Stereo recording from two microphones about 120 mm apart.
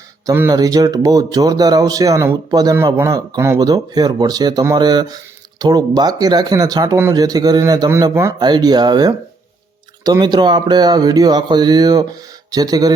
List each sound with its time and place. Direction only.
0.5 s speech: 30° right (ahead or behind)
8.4 s speech: 35° right (ahead or behind)